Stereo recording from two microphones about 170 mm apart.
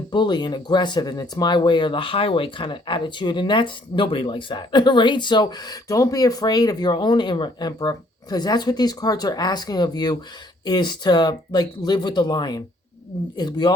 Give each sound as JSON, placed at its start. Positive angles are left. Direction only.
{"t": 0.1, "sound": "speech", "side_deg": 25}